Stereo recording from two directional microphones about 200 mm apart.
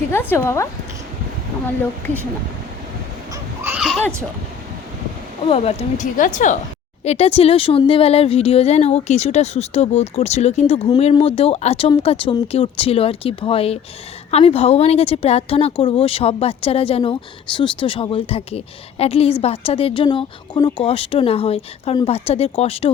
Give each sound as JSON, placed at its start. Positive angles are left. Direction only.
{"t": 0.1, "sound": "speech", "side_deg": 10}
{"t": 3.6, "sound": "a sound", "side_deg": -5}
{"t": 5.5, "sound": "a woman's voice", "side_deg": 35}